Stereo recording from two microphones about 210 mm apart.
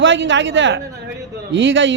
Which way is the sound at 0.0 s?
60° right (ahead or behind).